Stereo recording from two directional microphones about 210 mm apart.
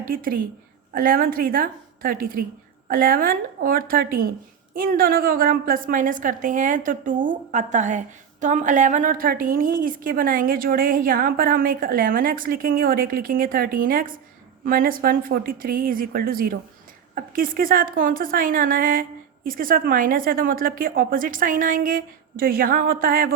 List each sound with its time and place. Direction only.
0.0 s a woman's voice: 45° right (ahead or behind)